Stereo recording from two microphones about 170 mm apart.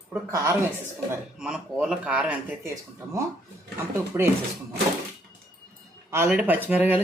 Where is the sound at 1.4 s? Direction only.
5° right (ahead or behind).